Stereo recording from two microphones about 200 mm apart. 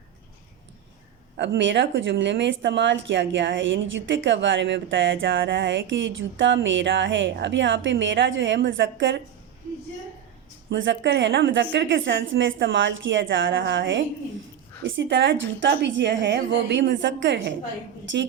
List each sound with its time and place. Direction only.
1.4 s a woman's voice: 65° right (ahead or behind)
10.7 s a woman's voice: 65° right (ahead or behind)